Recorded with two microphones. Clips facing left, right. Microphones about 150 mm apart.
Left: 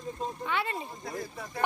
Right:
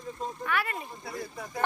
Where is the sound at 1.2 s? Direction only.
10° right (ahead or behind).